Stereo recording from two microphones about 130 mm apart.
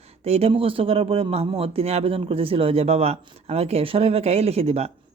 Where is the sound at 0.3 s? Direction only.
50° right (ahead or behind).